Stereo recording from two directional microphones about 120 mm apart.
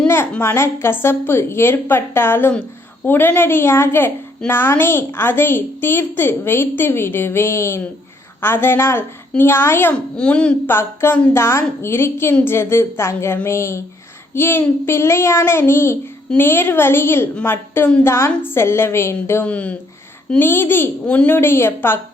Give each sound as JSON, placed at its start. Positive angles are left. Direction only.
{"t": 0.1, "sound": "a woman's voice", "side_deg": 20}
{"t": 9.9, "sound": "speech", "side_deg": 10}
{"t": 10.8, "sound": "a woman's voice", "side_deg": 20}